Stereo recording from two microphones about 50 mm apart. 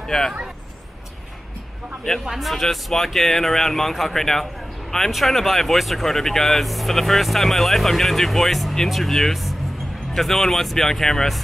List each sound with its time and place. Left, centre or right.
0.1 s speech: centre
2.2 s speech: centre